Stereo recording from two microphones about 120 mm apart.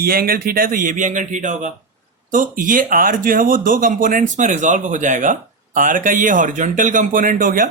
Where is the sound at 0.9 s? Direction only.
90° right.